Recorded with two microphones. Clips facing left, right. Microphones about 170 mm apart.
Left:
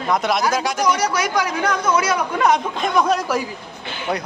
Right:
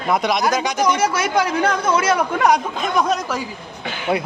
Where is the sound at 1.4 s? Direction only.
30° right (ahead or behind).